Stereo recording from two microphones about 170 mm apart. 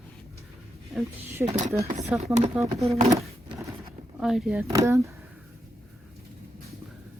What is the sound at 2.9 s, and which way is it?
Speech, 40° right (ahead or behind).